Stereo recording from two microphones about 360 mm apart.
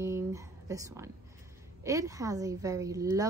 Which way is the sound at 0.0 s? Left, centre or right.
Centre.